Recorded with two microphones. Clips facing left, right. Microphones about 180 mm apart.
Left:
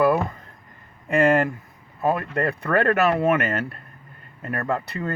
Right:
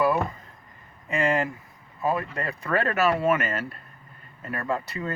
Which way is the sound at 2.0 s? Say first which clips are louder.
Left 4 dB; 60° left (ahead or behind).